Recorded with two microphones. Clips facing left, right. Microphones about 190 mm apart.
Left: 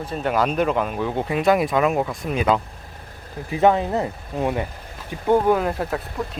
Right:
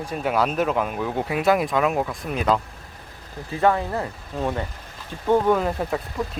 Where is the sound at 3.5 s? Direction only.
20° left (ahead or behind).